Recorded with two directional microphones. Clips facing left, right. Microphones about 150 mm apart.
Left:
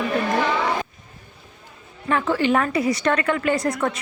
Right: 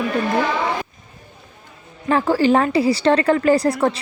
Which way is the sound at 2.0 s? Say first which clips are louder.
Right 4 dB; 35° right (ahead or behind).